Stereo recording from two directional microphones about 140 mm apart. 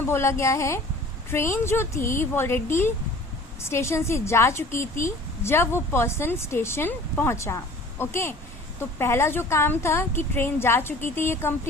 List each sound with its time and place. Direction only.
0.0 s a woman's voice: 15° left (ahead or behind)